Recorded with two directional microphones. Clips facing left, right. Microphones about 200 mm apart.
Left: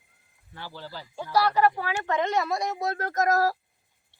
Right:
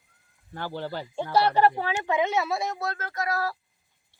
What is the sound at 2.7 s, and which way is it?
Speech, 20° left (ahead or behind).